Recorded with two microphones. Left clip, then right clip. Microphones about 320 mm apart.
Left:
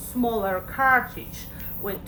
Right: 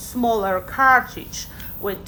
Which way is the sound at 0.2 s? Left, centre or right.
Right.